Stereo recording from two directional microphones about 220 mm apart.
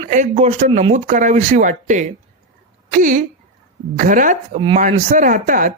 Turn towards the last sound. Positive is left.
turn(degrees=-35)  # may be behind; listen again after turning